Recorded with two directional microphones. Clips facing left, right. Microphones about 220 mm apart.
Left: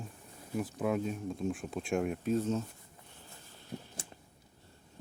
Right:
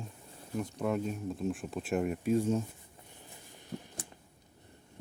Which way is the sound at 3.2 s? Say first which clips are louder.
Right 2 dB; 15° right (ahead or behind).